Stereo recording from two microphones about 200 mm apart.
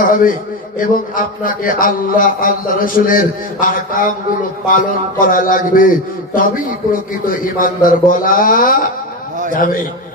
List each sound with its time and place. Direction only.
0.0 s a man's voice: 45° left (ahead or behind)